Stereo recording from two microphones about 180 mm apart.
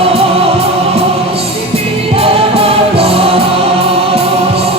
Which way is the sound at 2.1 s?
35° right (ahead or behind).